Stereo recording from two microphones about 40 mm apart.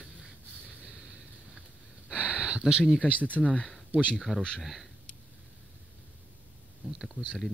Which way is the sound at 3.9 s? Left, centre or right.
Right.